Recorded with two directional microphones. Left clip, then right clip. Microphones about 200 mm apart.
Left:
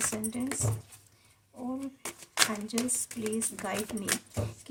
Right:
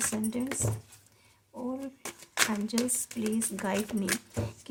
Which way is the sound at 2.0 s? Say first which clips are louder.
Left 1 dB; 5° left (ahead or behind).